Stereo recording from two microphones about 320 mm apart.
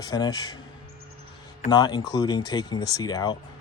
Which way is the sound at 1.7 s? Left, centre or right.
Centre.